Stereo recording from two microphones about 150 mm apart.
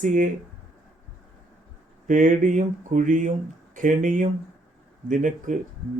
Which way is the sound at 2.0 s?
60° right (ahead or behind).